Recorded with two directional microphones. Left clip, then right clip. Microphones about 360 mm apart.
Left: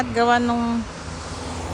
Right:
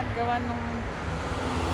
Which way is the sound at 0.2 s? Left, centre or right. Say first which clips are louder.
Left 11 dB; centre.